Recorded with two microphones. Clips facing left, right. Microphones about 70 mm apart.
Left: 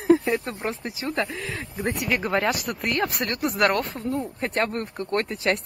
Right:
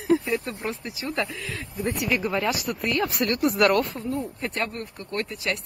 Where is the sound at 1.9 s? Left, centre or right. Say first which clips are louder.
Left 1 dB; left.